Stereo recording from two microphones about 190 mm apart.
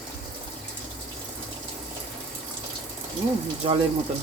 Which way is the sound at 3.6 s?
30° right (ahead or behind).